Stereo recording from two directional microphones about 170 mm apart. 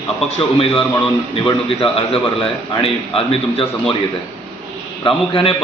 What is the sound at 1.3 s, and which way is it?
A man's voice, 30° left (ahead or behind).